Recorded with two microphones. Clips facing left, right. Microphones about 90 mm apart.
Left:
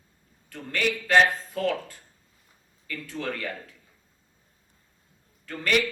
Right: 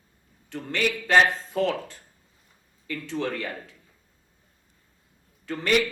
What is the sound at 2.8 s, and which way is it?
Speech, 25° right (ahead or behind).